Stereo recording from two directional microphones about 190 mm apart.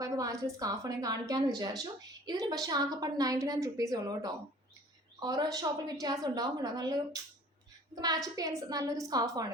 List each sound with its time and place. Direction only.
0.0 s a woman's voice: 15° right (ahead or behind)